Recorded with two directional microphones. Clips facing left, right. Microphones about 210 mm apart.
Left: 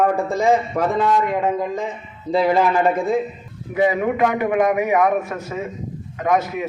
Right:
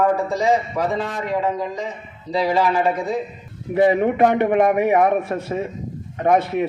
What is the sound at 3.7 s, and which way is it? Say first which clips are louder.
A man's voice: right 2 dB; 30° right (ahead or behind).